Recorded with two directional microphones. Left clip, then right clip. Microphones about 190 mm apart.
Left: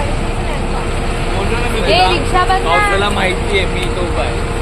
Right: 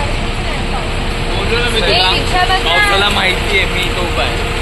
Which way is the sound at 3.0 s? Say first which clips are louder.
Right 3 dB; 15° left (ahead or behind).